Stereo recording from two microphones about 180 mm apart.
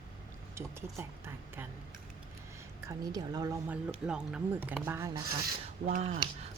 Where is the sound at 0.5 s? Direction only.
15° right (ahead or behind).